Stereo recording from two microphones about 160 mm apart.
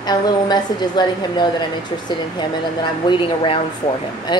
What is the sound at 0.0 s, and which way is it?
A woman's voice, 25° left (ahead or behind).